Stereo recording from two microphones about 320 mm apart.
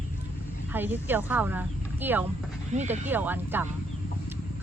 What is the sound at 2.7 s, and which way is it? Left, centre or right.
Speech, right.